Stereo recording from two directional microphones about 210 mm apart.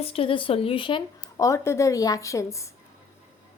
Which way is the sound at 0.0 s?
25° left (ahead or behind).